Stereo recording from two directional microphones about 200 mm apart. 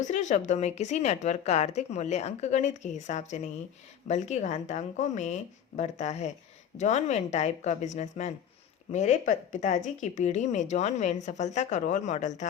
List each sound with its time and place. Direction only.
0.0 s a woman's voice: 35° left (ahead or behind)